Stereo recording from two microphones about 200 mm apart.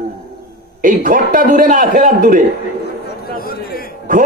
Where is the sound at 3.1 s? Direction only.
50° left (ahead or behind).